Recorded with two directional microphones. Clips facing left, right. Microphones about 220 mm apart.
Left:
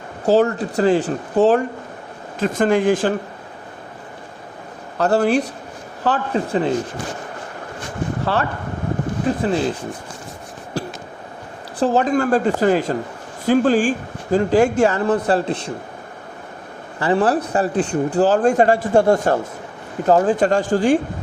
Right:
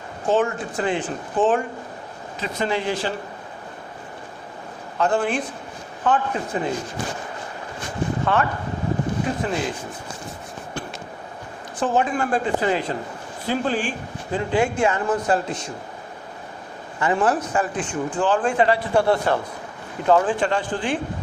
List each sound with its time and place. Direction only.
0.3 s speech: 40° left (ahead or behind)
4.9 s speech: 40° left (ahead or behind)
8.2 s speech: 35° left (ahead or behind)
11.8 s speech: 40° left (ahead or behind)
17.0 s speech: 35° left (ahead or behind)